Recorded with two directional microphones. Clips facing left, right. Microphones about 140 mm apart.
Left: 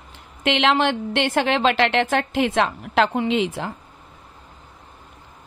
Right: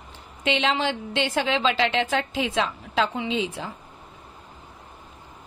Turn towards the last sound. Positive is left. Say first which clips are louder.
# left 5 dB
turn(degrees=60)  # may be behind; listen again after turning